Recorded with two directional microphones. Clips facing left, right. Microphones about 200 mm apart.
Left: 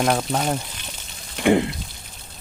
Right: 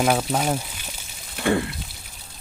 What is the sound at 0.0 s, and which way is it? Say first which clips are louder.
Speech: even; 5° right (ahead or behind).